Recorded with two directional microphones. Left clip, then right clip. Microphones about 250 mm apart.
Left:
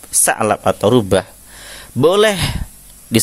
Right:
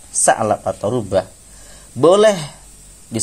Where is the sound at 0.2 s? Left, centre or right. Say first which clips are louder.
Even; left.